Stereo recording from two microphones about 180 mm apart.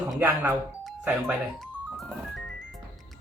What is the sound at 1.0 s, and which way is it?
Speech, 5° right (ahead or behind).